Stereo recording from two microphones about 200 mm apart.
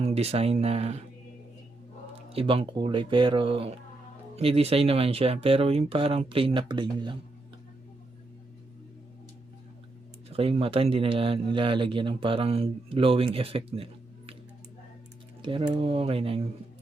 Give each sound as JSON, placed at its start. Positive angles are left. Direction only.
{"t": 0.0, "sound": "speech", "side_deg": -30}
{"t": 2.3, "sound": "speech", "side_deg": -30}
{"t": 10.3, "sound": "speech", "side_deg": -30}
{"t": 15.4, "sound": "speech", "side_deg": -25}